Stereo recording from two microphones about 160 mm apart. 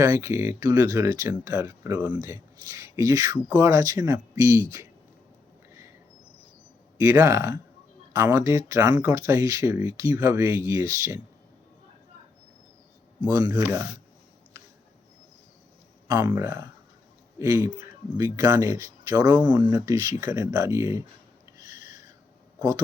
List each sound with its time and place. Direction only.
0.0 s speech: 20° right (ahead or behind)
7.0 s speech: 20° right (ahead or behind)
13.2 s speech: 25° right (ahead or behind)
16.0 s speech: 20° right (ahead or behind)
19.3 s speech: 10° right (ahead or behind)
19.7 s speech: 20° right (ahead or behind)
21.6 s a sound: 25° right (ahead or behind)